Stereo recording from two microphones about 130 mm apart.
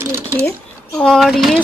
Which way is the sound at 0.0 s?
20° right (ahead or behind).